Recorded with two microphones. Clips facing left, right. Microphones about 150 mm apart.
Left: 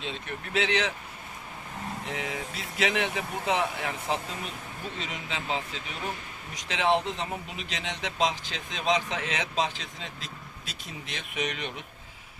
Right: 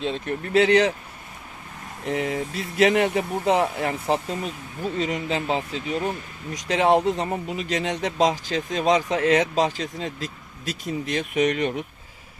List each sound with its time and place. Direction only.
0.0 s speech: 40° right (ahead or behind)
2.0 s speech: 40° right (ahead or behind)